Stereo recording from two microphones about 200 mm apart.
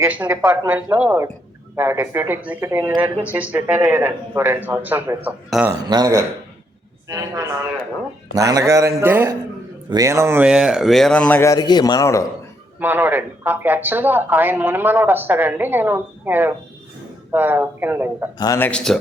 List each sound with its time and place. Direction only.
0.0 s speech: 10° right (ahead or behind)
5.8 s speech: 20° right (ahead or behind); by 12.3 s 15° left (ahead or behind)
12.8 s speech: 10° right (ahead or behind)
18.3 s a man's voice: 15° left (ahead or behind)